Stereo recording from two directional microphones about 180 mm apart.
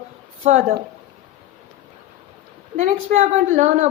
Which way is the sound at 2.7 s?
40° right (ahead or behind).